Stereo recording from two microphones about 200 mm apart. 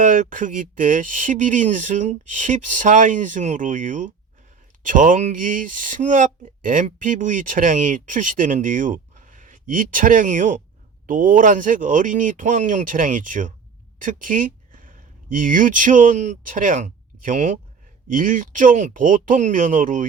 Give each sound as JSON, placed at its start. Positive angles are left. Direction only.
{"t": 0.0, "sound": "speech", "side_deg": -40}